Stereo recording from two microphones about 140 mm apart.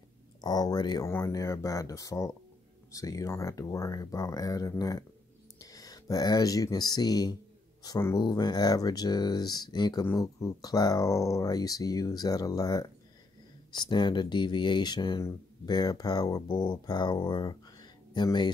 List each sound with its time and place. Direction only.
0.4 s speech: 30° left (ahead or behind)